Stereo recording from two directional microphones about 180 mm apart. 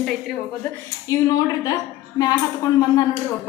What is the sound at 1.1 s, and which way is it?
Speech, 20° left (ahead or behind).